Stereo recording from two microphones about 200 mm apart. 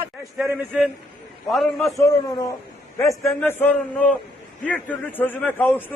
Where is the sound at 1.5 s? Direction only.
Centre (ahead or behind).